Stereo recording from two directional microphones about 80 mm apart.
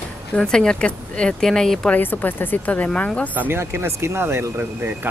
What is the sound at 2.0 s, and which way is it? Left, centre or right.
Speech, left.